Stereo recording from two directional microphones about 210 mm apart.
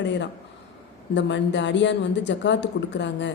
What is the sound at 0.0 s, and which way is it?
Speech, 60° left (ahead or behind).